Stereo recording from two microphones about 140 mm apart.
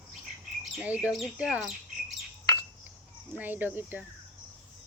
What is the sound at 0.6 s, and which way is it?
Speech, 5° right (ahead or behind).